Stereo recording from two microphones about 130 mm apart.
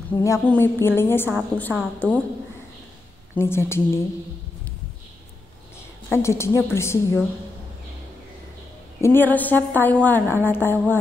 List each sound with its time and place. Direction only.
0.1 s a woman's voice: 25° left (ahead or behind)
3.3 s a woman's voice: 20° left (ahead or behind)
6.1 s a woman's voice: 20° left (ahead or behind)
9.0 s a woman's voice: 15° left (ahead or behind)